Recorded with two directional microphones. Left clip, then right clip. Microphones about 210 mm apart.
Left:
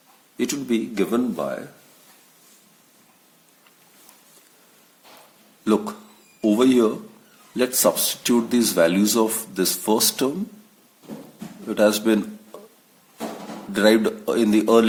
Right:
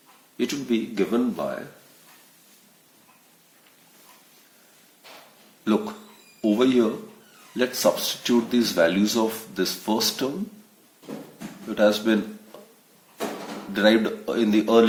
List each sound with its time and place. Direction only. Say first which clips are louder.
0.3 s speech: left 2 dB; 40° left (ahead or behind)
5.6 s a sound: left 3 dB; 40° left (ahead or behind)
6.4 s speech: left 3 dB; 40° left (ahead or behind)
11.7 s speech: left 2 dB; 40° left (ahead or behind)
13.7 s speech: left 2 dB; 40° left (ahead or behind)